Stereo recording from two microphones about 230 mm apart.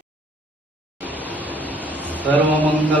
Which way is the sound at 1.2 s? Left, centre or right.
Centre.